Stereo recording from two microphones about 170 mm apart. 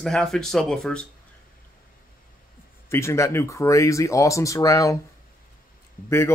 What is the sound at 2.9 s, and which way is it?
Speech, 15° left (ahead or behind).